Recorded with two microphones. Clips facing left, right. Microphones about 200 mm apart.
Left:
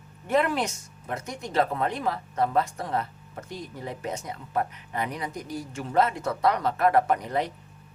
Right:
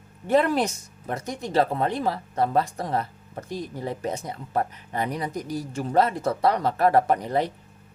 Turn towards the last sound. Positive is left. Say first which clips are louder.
# right 2 dB
turn(degrees=-30)  # may be behind; listen again after turning